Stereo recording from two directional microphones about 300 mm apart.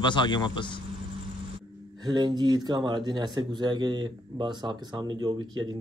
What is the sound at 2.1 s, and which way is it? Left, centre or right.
A man's voice, centre.